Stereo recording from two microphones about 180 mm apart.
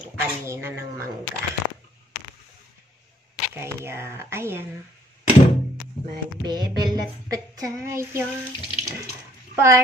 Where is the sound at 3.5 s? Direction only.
15° right (ahead or behind).